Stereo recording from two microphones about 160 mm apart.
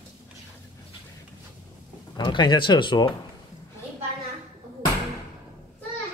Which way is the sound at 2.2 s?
30° left (ahead or behind).